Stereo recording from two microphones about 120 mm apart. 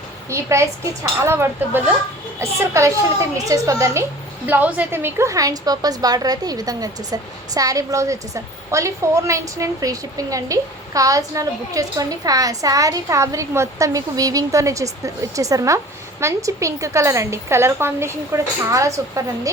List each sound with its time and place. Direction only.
0.3 s a woman's voice: 25° right (ahead or behind)
4.4 s a woman's voice: 15° right (ahead or behind)